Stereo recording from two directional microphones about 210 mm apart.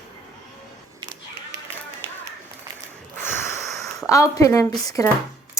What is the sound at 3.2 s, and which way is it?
Snort, 10° left (ahead or behind).